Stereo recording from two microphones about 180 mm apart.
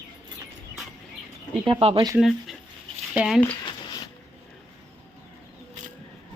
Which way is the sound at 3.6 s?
25° left (ahead or behind).